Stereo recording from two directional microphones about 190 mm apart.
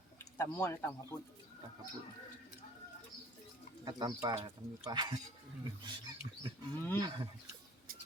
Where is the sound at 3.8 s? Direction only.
20° right (ahead or behind).